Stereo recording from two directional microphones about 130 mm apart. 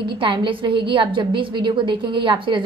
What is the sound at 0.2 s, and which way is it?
A woman's voice, 40° right (ahead or behind).